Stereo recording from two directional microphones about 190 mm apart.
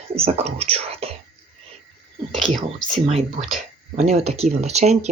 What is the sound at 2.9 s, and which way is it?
Speech, 35° right (ahead or behind).